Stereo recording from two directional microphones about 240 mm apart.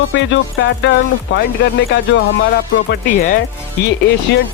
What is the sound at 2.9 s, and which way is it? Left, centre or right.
Speech, left.